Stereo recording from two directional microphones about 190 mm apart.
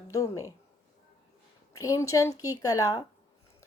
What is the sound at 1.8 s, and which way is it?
Speech, 15° left (ahead or behind).